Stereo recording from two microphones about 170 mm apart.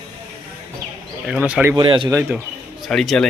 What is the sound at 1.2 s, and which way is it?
Speech, 5° right (ahead or behind).